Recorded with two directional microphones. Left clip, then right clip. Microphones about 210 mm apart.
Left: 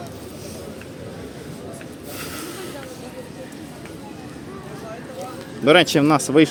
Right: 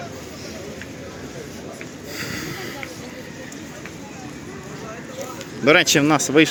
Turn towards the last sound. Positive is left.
turn(degrees=10)  # may be behind; listen again after turning